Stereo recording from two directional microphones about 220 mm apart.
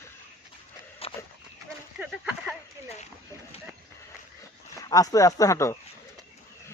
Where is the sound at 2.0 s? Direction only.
5° right (ahead or behind).